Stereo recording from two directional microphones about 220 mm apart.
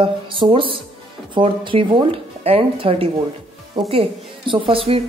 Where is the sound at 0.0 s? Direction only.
25° right (ahead or behind).